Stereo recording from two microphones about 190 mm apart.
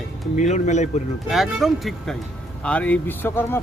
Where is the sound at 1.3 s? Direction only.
Centre (ahead or behind).